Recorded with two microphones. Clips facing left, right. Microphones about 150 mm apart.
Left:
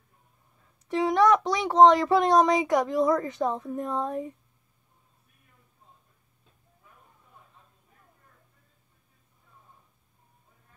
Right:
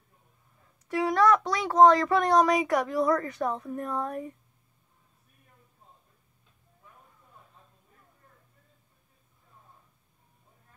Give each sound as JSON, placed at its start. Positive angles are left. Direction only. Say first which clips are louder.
{"t": 0.8, "sound": "a child's voice", "louder": "left 2 dB", "side_deg": 20}